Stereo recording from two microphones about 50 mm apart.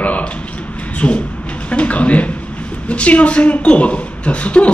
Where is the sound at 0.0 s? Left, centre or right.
Left.